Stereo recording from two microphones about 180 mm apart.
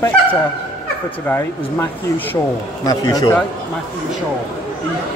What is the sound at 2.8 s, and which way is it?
Speech, 20° left (ahead or behind).